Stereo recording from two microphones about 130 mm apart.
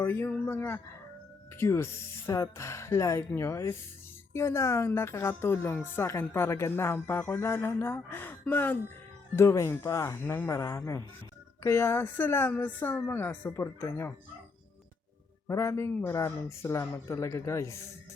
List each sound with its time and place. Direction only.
0.0 s speech: 20° left (ahead or behind)
15.4 s speech: 25° left (ahead or behind)
16.1 s speech: 25° left (ahead or behind)